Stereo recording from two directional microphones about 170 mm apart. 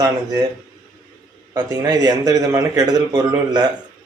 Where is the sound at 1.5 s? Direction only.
20° right (ahead or behind).